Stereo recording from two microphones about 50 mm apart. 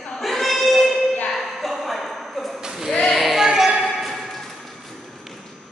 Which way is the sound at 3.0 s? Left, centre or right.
Centre.